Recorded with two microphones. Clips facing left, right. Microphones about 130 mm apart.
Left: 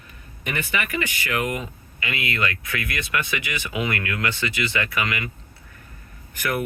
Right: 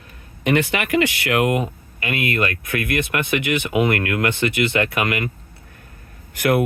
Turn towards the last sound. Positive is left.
turn(degrees=-80)